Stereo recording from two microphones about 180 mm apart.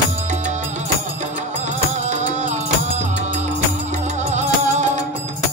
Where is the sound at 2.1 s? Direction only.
40° right (ahead or behind).